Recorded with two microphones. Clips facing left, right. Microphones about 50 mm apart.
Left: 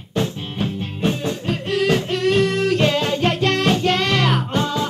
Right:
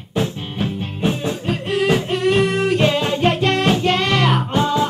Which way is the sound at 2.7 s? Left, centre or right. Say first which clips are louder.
Right 1 dB; centre.